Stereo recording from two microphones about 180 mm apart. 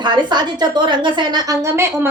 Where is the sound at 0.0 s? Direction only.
25° right (ahead or behind).